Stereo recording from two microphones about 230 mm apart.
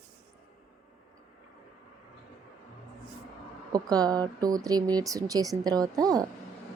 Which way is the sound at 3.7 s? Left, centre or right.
Centre.